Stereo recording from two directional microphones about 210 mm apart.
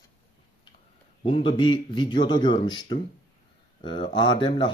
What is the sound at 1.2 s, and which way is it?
Speech, 25° left (ahead or behind).